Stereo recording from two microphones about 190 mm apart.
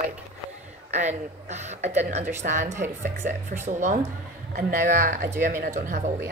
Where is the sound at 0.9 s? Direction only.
35° right (ahead or behind).